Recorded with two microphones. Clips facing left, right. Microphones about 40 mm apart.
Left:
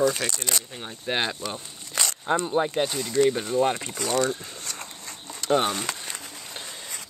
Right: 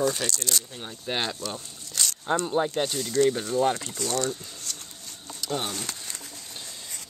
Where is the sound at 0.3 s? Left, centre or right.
Left.